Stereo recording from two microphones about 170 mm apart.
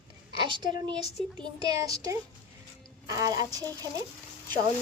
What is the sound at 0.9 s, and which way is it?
Speech, 5° left (ahead or behind).